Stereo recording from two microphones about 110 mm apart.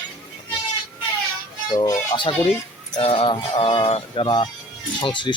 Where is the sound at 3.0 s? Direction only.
50° left (ahead or behind).